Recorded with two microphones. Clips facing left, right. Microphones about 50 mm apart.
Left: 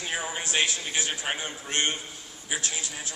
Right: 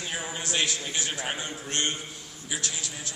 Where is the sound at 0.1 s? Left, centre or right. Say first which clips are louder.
Left 3 dB; centre.